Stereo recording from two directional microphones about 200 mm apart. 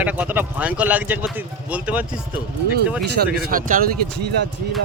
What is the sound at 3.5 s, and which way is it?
Speech, 45° right (ahead or behind).